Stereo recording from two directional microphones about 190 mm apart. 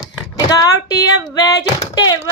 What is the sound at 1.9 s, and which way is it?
Speech, 20° left (ahead or behind).